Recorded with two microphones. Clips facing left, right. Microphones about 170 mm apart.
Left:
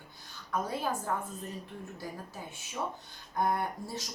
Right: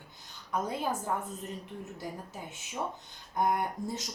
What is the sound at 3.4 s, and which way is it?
Speech, 15° right (ahead or behind).